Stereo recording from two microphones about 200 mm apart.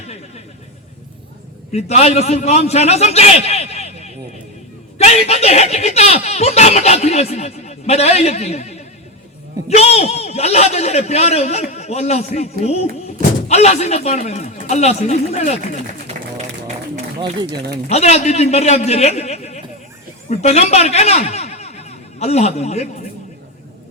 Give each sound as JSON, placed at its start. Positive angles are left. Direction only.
{"t": 0.0, "sound": "a sound", "side_deg": 35}
{"t": 1.7, "sound": "a man's voice", "side_deg": 35}
{"t": 17.8, "sound": "speech", "side_deg": 35}